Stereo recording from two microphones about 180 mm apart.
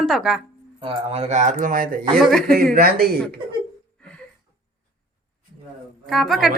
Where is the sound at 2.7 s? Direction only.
55° right (ahead or behind).